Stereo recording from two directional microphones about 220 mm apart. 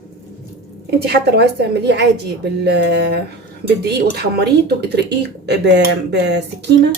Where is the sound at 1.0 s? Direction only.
50° right (ahead or behind).